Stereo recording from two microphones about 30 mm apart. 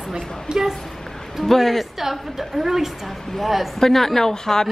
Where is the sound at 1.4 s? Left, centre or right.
Centre.